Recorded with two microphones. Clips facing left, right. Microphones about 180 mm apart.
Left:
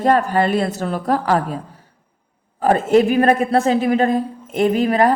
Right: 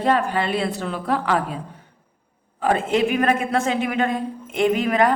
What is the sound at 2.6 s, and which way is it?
A woman's voice, 40° left (ahead or behind).